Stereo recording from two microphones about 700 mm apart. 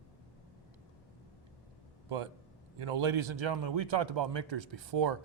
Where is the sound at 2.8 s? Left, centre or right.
Right.